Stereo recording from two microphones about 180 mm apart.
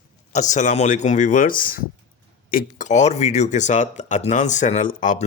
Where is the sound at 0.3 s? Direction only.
40° left (ahead or behind).